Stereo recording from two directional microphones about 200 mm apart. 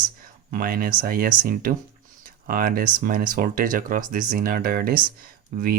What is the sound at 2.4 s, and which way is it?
Speech, 45° right (ahead or behind).